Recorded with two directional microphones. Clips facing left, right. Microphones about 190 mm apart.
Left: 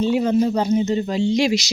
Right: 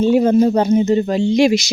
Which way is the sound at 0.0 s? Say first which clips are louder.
Right 5 dB; 50° right (ahead or behind).